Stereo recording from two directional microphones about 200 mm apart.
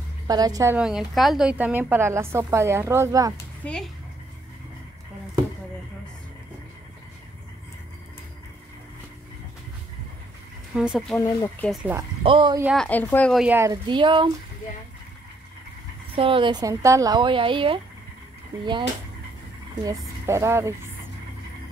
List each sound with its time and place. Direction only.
0.3 s a woman's voice: 20° right (ahead or behind)
0.7 s a woman's voice: 5° right (ahead or behind)
3.6 s a woman's voice: 5° left (ahead or behind)
10.7 s a woman's voice: 5° right (ahead or behind)
11.1 s speech: 15° left (ahead or behind)
11.7 s a woman's voice: 5° right (ahead or behind)
12.2 s speech: 25° right (ahead or behind)
12.7 s a woman's voice: 5° left (ahead or behind); by 13.7 s 10° right (ahead or behind)
13.8 s a woman's voice: 25° right (ahead or behind)
16.2 s a woman's voice: 25° right (ahead or behind)
20.2 s a woman's voice: 15° right (ahead or behind)